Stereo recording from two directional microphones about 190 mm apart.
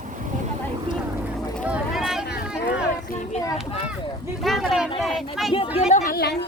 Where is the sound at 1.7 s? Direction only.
5° right (ahead or behind).